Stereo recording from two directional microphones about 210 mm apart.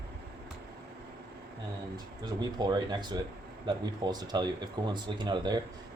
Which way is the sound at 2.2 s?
20° right (ahead or behind).